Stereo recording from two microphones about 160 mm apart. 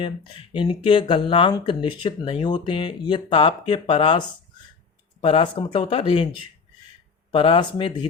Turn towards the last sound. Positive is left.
turn(degrees=30)  # may be behind; listen again after turning